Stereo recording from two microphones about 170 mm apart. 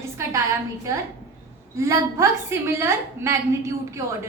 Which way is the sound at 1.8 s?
15° right (ahead or behind).